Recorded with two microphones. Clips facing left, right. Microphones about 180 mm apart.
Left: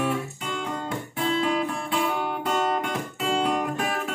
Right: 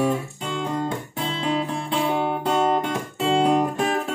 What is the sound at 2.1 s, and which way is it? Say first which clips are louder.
Guitar: right 4 dB; 30° right (ahead or behind).